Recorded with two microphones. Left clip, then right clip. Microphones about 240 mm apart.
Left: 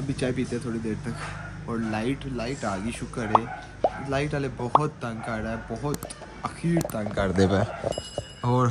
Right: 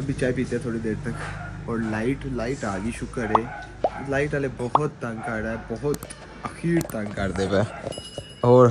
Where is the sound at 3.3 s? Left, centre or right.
Centre.